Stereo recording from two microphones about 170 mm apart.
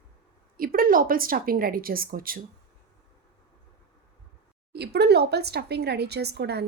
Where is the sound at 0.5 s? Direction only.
60° right (ahead or behind).